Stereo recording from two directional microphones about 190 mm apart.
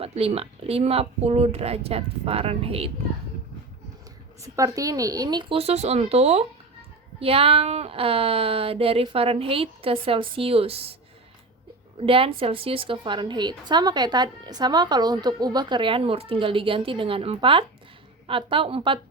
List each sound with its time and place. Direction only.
0.0 s speech: 30° right (ahead or behind)
4.4 s a woman's voice: 15° right (ahead or behind)
12.0 s a woman's voice: 30° right (ahead or behind)